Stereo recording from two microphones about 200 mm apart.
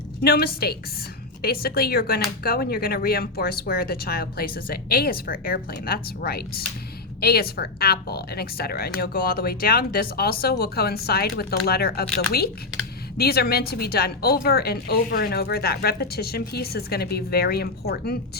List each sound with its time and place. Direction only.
0.2 s speech: 50° left (ahead or behind)